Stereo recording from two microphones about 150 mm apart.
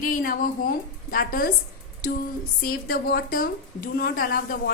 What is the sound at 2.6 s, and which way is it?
A woman's voice, 75° left (ahead or behind).